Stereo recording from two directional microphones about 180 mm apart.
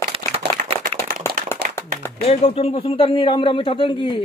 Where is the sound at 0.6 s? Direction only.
50° right (ahead or behind).